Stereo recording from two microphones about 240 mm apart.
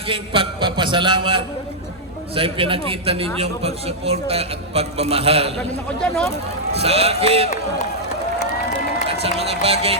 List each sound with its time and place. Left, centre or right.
0.1 s a man's voice: right
6.0 s speech: centre
6.3 s a man's voice: right
9.4 s a man's voice: right